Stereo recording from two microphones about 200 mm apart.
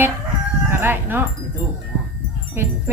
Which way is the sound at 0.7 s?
10° right (ahead or behind).